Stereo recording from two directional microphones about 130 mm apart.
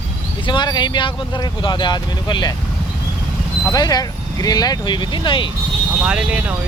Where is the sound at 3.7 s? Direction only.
30° left (ahead or behind).